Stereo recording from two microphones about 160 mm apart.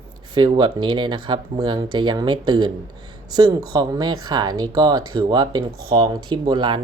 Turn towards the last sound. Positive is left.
turn(degrees=-30)  # may be behind; listen again after turning